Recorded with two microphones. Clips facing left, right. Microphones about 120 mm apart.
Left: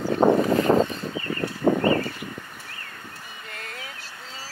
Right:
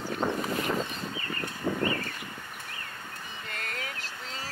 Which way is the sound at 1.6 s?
65° left (ahead or behind).